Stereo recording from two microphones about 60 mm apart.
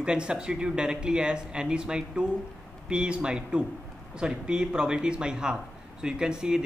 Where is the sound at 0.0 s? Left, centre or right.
Centre.